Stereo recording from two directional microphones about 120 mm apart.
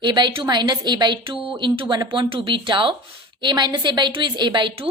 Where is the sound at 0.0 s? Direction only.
40° right (ahead or behind).